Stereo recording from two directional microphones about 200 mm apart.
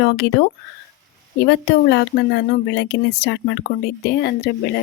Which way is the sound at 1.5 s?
55° left (ahead or behind).